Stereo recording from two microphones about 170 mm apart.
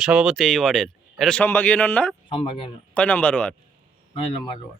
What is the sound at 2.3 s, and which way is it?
Speech, 35° left (ahead or behind).